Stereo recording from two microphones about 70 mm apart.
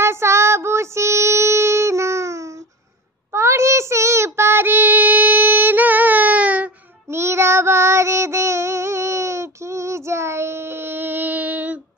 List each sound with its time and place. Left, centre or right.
0.0 s child singing: right
7.1 s child singing: right